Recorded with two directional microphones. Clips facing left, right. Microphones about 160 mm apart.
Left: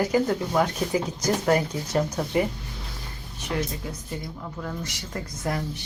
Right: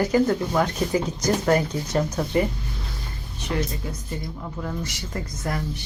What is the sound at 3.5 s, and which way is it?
Speech, centre (ahead or behind).